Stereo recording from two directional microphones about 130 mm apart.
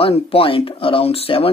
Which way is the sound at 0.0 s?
45° left (ahead or behind).